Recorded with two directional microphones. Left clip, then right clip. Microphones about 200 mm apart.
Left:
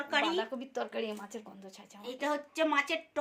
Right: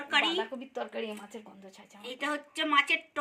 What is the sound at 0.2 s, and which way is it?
Speech, 5° left (ahead or behind).